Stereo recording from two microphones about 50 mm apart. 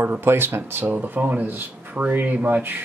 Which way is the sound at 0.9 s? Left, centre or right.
Right.